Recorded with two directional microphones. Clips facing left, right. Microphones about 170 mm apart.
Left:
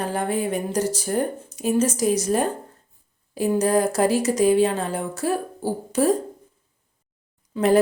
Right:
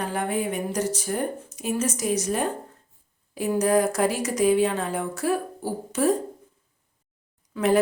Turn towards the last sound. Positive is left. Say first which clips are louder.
# left 3 dB
turn(degrees=35)  # may be behind; listen again after turning